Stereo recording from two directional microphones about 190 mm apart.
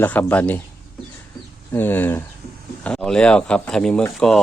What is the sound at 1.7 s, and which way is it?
Speech, 10° left (ahead or behind).